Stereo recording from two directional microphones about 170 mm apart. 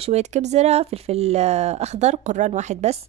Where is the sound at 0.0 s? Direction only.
40° right (ahead or behind).